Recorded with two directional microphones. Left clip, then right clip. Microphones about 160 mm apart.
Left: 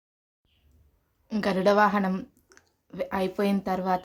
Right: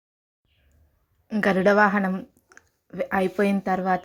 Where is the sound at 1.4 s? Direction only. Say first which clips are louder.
Right 3 dB; 10° right (ahead or behind).